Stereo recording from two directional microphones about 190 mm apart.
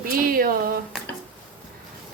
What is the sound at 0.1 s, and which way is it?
Speech, 50° right (ahead or behind).